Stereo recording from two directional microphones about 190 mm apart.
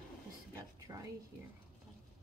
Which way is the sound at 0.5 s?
20° right (ahead or behind).